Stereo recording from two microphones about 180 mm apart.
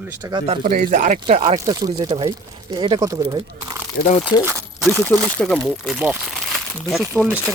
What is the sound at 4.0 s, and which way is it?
Speech, 60° left (ahead or behind).